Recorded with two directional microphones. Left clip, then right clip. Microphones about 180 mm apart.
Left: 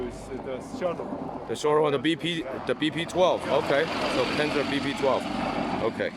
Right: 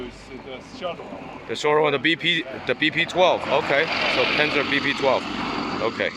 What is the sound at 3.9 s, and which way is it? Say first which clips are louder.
Speech: right 5 dB; 35° left (ahead or behind).